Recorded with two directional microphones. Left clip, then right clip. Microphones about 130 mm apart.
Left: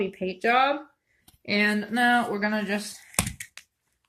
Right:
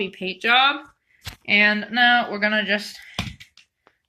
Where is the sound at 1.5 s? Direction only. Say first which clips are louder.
Right 7 dB; 10° right (ahead or behind).